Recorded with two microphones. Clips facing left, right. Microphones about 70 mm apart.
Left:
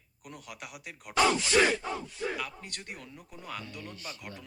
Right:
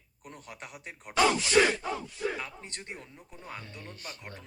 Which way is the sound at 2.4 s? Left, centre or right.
Right.